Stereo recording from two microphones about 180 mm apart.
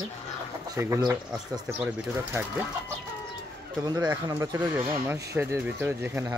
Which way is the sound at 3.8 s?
20° right (ahead or behind).